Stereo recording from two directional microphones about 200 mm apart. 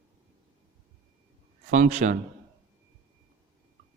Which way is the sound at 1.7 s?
40° right (ahead or behind).